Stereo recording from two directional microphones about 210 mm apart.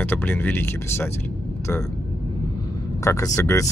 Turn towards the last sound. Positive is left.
turn(degrees=15)  # may be behind; listen again after turning